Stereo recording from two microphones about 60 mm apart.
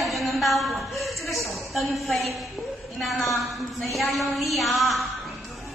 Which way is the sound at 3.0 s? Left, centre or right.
Centre.